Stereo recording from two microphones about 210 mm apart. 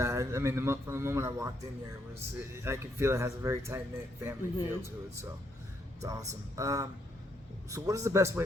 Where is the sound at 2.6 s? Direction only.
10° right (ahead or behind).